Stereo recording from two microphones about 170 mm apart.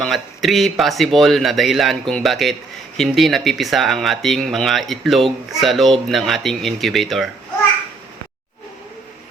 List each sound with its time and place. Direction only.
0.0 s speech: centre (ahead or behind)